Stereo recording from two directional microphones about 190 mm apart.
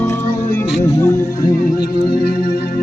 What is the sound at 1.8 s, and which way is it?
Music, 50° left (ahead or behind).